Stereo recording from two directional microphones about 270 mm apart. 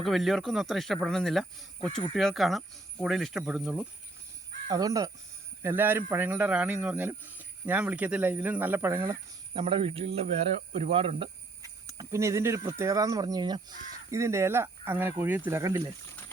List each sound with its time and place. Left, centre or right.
0.0 s speech: centre